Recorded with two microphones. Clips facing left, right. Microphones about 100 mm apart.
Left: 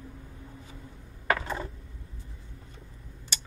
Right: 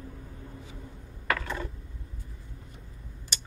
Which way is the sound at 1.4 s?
30° left (ahead or behind).